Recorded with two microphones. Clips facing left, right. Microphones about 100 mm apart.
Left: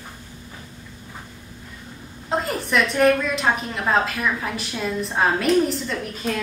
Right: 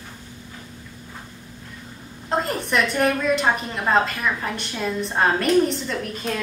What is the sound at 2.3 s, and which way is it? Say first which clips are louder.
A woman's voice: even; centre (ahead or behind).